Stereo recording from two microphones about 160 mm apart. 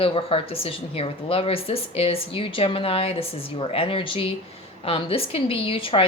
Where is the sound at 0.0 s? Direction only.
35° left (ahead or behind).